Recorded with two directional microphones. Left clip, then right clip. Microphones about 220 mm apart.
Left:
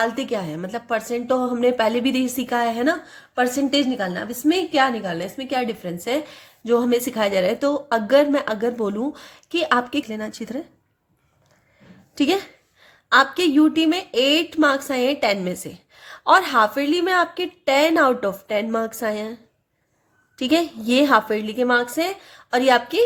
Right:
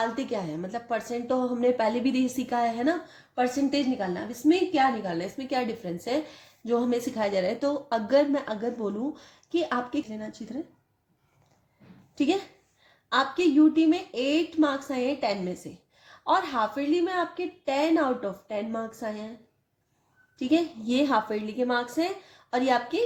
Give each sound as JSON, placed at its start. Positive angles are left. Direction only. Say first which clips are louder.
{"t": 0.0, "sound": "a woman's voice", "louder": "left 6 dB", "side_deg": 25}
{"t": 12.1, "sound": "speech", "louder": "left 6 dB", "side_deg": 35}
{"t": 20.4, "sound": "speech", "louder": "left 6 dB", "side_deg": 40}